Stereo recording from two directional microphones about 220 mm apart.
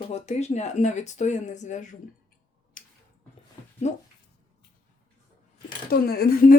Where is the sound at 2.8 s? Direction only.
40° left (ahead or behind).